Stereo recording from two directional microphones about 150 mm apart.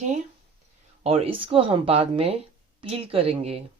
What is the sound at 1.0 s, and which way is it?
Speech, 40° right (ahead or behind).